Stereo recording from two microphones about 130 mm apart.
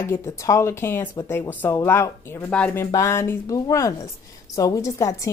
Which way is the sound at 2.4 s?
10° left (ahead or behind).